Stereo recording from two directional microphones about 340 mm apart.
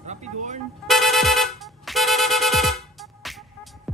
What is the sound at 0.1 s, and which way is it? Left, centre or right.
Speech, centre.